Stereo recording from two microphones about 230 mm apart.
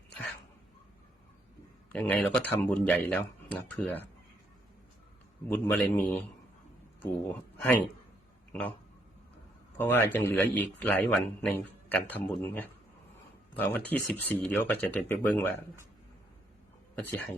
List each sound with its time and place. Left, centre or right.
1.9 s a man's voice: centre
5.5 s a man's voice: centre
7.5 s a sound: centre
9.7 s a man's voice: centre
16.9 s speech: centre